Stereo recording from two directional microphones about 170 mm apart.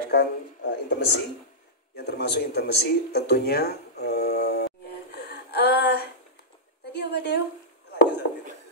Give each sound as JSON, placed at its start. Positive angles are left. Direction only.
{"t": 0.1, "sound": "speech", "side_deg": 75}
{"t": 2.0, "sound": "a sound", "side_deg": 75}
{"t": 7.9, "sound": "chopping", "side_deg": 90}